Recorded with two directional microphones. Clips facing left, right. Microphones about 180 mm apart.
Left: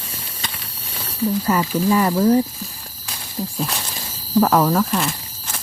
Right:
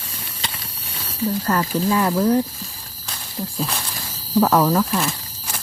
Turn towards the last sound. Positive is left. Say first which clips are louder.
# even
turn(degrees=0)  # may be behind; listen again after turning